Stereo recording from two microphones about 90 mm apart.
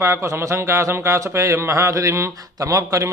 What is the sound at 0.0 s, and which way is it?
A man's voice, 30° right (ahead or behind).